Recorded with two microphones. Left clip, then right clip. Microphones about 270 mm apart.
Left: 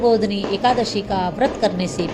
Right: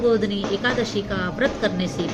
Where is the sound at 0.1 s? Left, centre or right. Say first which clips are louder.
Left 3 dB; centre.